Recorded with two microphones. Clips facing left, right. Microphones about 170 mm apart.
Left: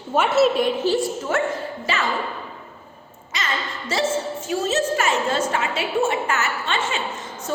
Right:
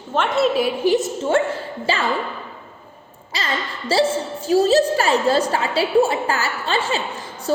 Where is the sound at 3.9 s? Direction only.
30° right (ahead or behind).